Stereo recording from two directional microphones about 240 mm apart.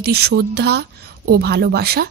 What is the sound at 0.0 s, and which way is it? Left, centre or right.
Speech, right.